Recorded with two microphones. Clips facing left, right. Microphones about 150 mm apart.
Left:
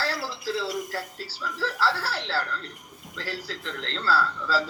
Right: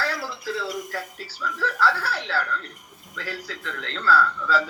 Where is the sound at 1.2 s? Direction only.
30° left (ahead or behind).